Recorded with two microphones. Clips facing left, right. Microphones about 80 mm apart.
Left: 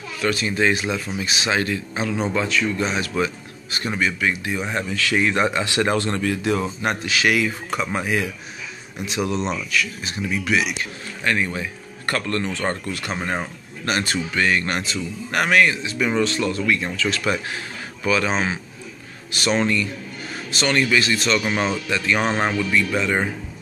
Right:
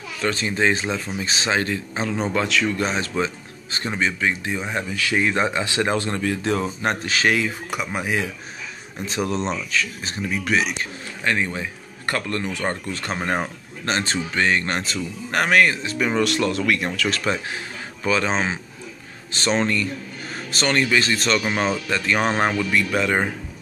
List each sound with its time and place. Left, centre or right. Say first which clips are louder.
0.2 s speech: left 1 dB; right
2.4 s speech: even; right
2.8 s speech: left 1 dB; right
6.3 s speech: left 1 dB; right
7.7 s speech: left 1 dB; centre
9.0 s speech: even; right
11.2 s speech: left 1 dB; right
12.9 s speech: right 1 dB; right
16.2 s speech: right 1 dB; right
18.0 s speech: even; right
22.8 s speech: even; right